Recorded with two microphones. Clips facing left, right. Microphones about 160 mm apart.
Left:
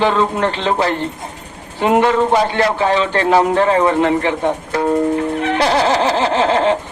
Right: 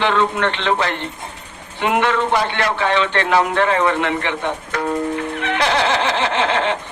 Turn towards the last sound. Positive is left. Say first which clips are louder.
# left 5 dB
turn(degrees=40)  # may be behind; listen again after turning